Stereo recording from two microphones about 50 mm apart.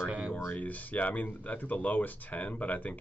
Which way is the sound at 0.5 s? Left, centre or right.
Left.